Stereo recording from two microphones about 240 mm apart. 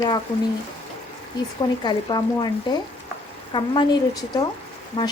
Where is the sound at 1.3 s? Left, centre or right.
Centre.